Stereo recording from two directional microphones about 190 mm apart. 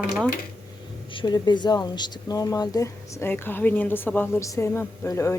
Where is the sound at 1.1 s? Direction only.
25° left (ahead or behind).